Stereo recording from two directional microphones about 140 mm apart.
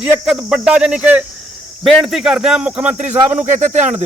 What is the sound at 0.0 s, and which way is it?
Speech, 5° right (ahead or behind).